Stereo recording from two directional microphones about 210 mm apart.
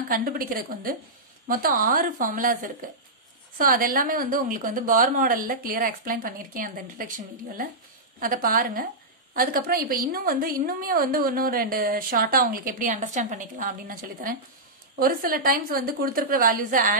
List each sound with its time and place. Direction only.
0.1 s a woman's voice: 40° right (ahead or behind)
8.2 s a woman's voice: 40° right (ahead or behind)